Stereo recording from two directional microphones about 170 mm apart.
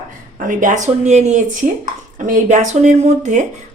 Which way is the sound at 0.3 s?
50° right (ahead or behind).